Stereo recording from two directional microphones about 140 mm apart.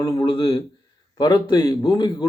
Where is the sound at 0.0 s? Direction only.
25° left (ahead or behind).